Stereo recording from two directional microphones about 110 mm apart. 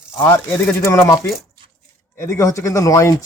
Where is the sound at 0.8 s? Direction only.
25° left (ahead or behind).